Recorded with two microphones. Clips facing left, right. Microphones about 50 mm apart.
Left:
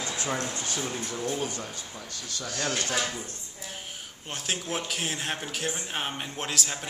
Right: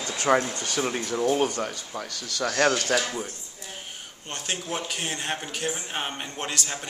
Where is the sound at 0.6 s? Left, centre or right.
Right.